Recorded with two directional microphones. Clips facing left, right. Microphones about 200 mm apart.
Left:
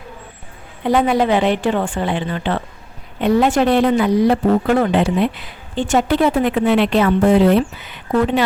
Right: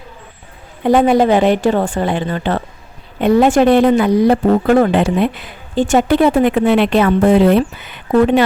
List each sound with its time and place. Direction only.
0.9 s speech: 45° right (ahead or behind)